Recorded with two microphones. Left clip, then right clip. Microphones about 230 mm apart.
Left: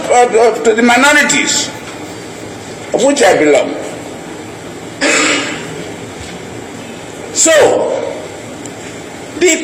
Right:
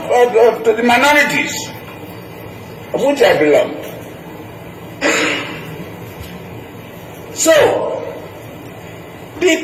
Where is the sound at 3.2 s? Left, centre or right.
Left.